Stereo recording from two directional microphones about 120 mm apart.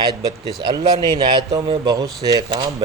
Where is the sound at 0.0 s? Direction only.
35° right (ahead or behind).